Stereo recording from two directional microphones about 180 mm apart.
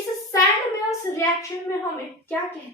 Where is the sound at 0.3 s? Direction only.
20° left (ahead or behind).